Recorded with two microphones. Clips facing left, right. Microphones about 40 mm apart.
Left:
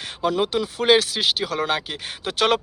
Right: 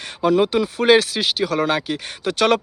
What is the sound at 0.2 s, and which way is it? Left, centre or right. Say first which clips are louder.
Speech: right 5 dB; centre.